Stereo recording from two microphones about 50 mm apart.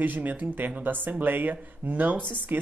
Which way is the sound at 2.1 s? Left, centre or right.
Left.